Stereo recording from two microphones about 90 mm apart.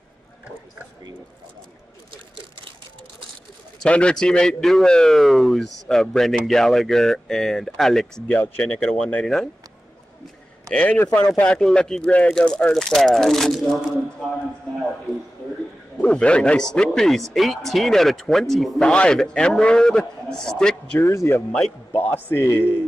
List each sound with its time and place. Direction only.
3.8 s speech: 10° left (ahead or behind)
8.3 s speech: 20° left (ahead or behind)
9.2 s speech: 5° left (ahead or behind)
10.7 s speech: 15° left (ahead or behind)
16.0 s speech: 10° left (ahead or behind)
21.0 s speech: 30° left (ahead or behind)
21.5 s speech: 10° left (ahead or behind)
21.9 s speech: 25° left (ahead or behind)